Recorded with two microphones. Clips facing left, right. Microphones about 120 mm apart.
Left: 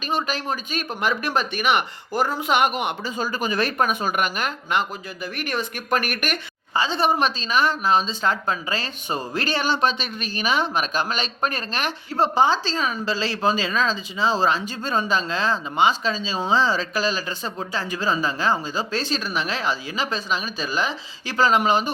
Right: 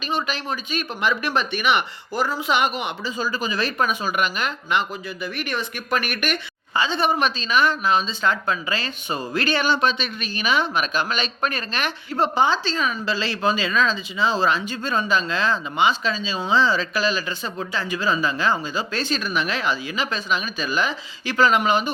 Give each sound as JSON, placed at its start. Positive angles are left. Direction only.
{"t": 0.1, "sound": "speech", "side_deg": 45}